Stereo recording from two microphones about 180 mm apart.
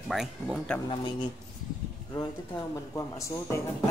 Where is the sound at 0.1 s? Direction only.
Centre (ahead or behind).